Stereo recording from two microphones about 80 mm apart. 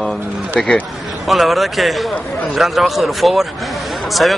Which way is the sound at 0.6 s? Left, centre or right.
Centre.